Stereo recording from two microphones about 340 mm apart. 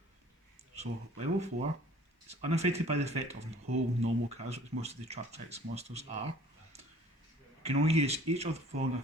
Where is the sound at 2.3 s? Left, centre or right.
Centre.